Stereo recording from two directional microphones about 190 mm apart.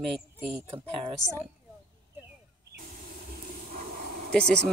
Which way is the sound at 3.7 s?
50° right (ahead or behind).